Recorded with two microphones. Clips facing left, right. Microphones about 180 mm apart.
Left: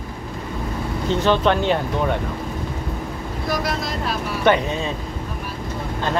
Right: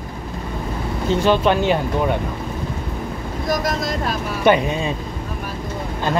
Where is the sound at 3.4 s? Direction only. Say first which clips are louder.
Right 3 dB; 45° right (ahead or behind).